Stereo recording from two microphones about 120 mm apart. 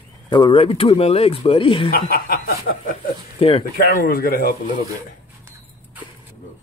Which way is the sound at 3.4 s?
55° left (ahead or behind).